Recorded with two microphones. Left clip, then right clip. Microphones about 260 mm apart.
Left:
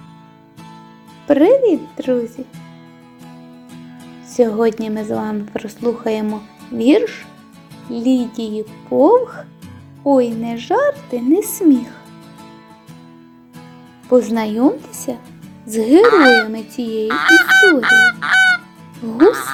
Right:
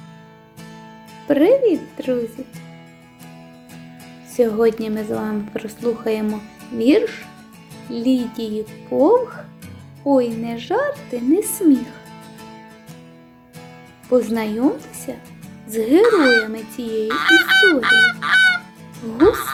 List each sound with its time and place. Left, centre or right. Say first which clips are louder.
1.3 s speech: left 3 dB; centre
4.3 s speech: left 2 dB; centre
14.1 s speech: left 4 dB; centre
16.0 s speech: left 5 dB; centre
16.4 s speech: left 4 dB; centre
17.1 s goose: left 4 dB; centre
19.1 s speech: left 3 dB; centre